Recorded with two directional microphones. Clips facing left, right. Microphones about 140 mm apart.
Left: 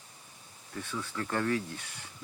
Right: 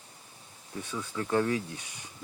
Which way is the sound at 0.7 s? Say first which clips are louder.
Right 1 dB; 15° right (ahead or behind).